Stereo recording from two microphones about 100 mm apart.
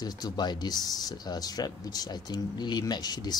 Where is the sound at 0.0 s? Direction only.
45° left (ahead or behind).